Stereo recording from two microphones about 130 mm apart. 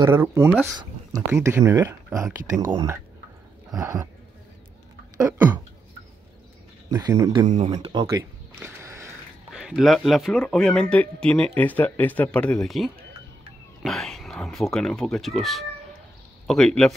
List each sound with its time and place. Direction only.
0.1 s speech: 20° right (ahead or behind)
5.1 s speech: 20° right (ahead or behind)
6.9 s speech: 30° right (ahead or behind)
7.4 s speech: 80° right
7.9 s speech: 35° right (ahead or behind)
8.5 s a sound: 20° right (ahead or behind)
9.5 s speech: 5° right (ahead or behind)